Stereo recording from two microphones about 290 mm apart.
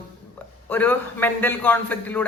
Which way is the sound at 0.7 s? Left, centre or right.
Centre.